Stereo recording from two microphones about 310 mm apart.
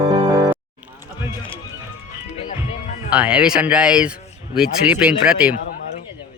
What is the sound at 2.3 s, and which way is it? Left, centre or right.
Music, centre.